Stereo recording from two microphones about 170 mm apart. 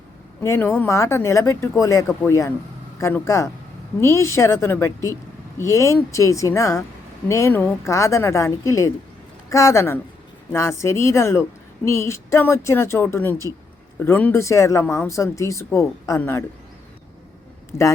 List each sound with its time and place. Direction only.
0.4 s speech: 15° left (ahead or behind)
17.7 s speech: 15° left (ahead or behind)